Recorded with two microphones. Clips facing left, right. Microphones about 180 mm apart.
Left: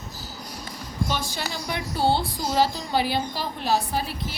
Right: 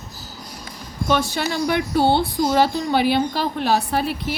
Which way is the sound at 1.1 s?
65° right (ahead or behind).